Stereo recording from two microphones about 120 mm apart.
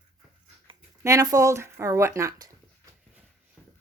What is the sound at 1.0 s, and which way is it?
Speech, 30° right (ahead or behind).